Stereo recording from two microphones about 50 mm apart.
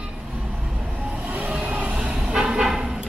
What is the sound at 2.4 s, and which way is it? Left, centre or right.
Vehicle, centre.